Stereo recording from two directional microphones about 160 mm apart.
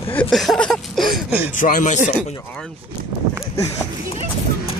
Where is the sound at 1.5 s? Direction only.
55° left (ahead or behind).